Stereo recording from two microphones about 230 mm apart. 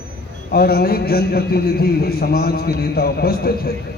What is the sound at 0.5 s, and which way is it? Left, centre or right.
A man's voice, left.